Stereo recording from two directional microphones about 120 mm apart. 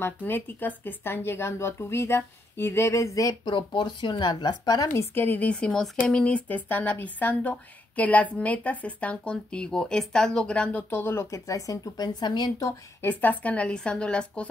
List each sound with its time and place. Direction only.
0.0 s a woman's voice: 15° left (ahead or behind); by 4.8 s 35° left (ahead or behind)
4.8 s speech: 20° left (ahead or behind)
13.0 s speech: 15° left (ahead or behind)